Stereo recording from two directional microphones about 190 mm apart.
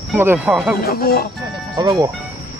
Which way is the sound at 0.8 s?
50° left (ahead or behind).